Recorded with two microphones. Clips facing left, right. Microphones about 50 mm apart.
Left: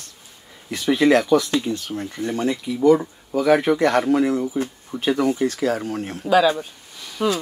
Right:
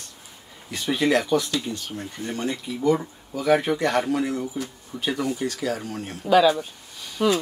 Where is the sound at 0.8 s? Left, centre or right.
Left.